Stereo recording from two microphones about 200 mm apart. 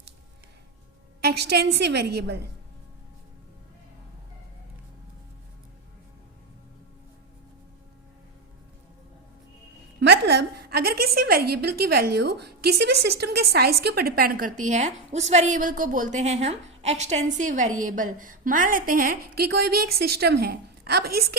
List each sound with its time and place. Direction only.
1.2 s a woman's voice: 55° right (ahead or behind)
10.0 s a woman's voice: 55° right (ahead or behind)